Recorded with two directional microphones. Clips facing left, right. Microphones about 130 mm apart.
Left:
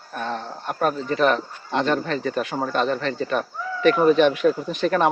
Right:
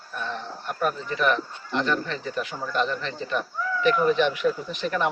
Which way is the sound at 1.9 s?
55° left (ahead or behind).